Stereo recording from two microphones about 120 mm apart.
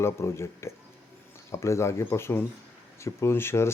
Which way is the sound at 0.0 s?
20° left (ahead or behind).